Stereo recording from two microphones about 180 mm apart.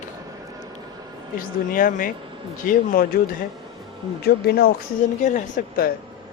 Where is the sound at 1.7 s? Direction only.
50° left (ahead or behind).